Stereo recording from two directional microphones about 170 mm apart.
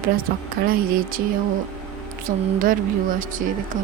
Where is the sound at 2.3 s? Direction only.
55° right (ahead or behind).